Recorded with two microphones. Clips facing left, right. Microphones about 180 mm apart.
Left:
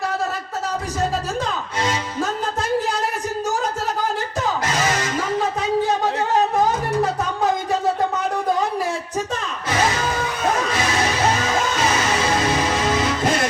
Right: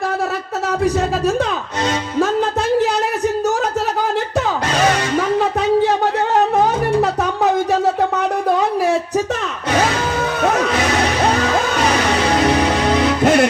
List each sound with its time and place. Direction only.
0.9 s speech: 65° right (ahead or behind)
4.7 s music: 65° right (ahead or behind)
5.4 s a sound: 65° right (ahead or behind)
12.4 s music: 70° right (ahead or behind)